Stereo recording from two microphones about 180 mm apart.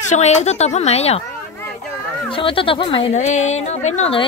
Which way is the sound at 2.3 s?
30° left (ahead or behind).